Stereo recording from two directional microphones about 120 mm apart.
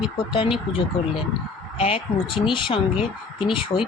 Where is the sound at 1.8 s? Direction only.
50° left (ahead or behind).